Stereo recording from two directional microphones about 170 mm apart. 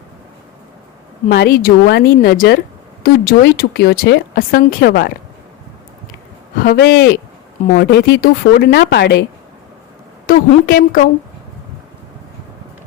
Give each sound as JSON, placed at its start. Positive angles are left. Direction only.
{"t": 1.3, "sound": "speech", "side_deg": 70}
{"t": 6.6, "sound": "speech", "side_deg": 65}
{"t": 10.2, "sound": "speech", "side_deg": 60}